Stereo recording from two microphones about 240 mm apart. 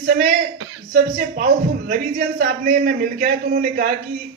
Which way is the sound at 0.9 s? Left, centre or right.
Right.